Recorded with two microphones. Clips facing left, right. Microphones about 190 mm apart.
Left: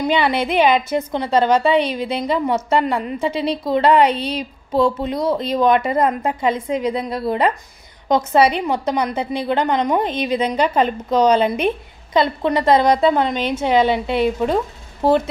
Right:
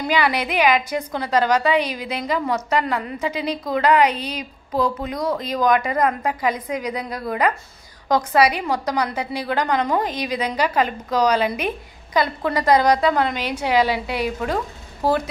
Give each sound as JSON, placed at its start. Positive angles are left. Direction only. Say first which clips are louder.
{"t": 0.0, "sound": "a woman's voice", "louder": "left 3 dB", "side_deg": 25}